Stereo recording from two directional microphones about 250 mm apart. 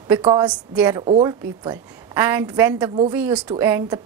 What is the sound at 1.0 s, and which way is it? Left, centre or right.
A woman's voice, centre.